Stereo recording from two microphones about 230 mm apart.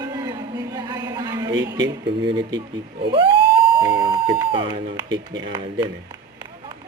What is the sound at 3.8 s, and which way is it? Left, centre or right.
Speech, centre.